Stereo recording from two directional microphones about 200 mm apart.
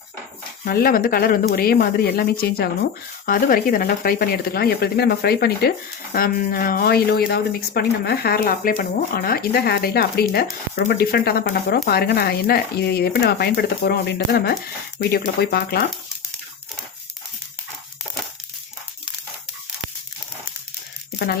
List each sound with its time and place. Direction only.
0.6 s speech: 50° left (ahead or behind)